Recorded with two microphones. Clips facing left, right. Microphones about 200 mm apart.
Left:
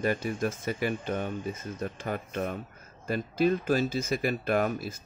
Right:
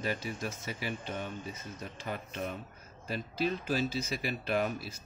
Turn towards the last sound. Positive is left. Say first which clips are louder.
# left 5 dB
turn(degrees=50)  # may be behind; listen again after turning